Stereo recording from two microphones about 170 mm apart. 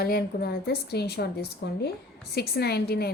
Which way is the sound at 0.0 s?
65° left (ahead or behind).